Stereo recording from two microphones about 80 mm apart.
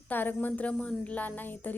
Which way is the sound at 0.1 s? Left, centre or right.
Left.